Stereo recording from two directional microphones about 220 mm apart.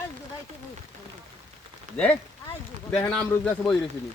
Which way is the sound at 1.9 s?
30° right (ahead or behind).